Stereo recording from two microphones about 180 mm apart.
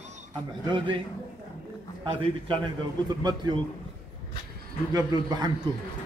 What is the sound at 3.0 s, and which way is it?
Speech, 20° right (ahead or behind).